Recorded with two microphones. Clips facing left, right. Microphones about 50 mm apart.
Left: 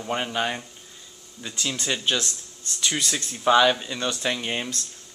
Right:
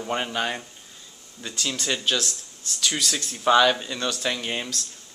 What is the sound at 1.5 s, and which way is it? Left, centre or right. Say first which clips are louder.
Speech: even; centre.